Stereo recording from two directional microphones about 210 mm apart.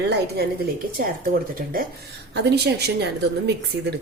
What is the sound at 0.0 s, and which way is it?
Speech, 55° right (ahead or behind).